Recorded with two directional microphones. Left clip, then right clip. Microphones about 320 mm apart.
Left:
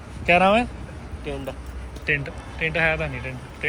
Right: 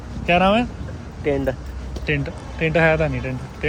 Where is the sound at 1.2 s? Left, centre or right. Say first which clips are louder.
Right 11 dB; right.